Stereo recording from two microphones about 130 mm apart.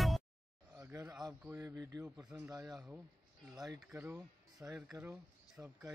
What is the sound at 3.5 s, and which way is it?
A man's voice, 25° right (ahead or behind).